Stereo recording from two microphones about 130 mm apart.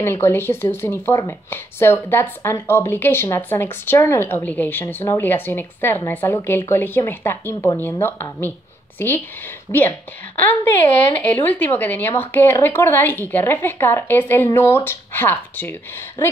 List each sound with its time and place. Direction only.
0.0 s a woman's voice: 20° left (ahead or behind)